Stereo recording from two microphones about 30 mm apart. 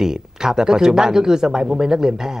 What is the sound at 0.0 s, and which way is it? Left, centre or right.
Speech, centre.